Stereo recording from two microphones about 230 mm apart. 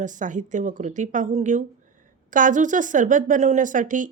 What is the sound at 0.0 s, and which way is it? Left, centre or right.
Speech, right.